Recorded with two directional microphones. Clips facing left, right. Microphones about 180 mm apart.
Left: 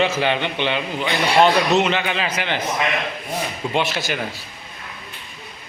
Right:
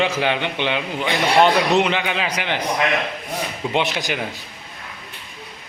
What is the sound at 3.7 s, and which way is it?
Speech, 20° right (ahead or behind).